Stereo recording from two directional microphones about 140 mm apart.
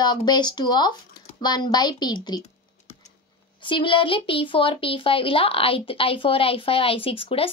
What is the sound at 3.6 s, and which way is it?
A woman's voice, 35° left (ahead or behind).